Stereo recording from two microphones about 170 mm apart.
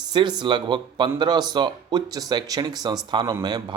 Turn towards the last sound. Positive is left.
turn(degrees=-20)  # may be behind; listen again after turning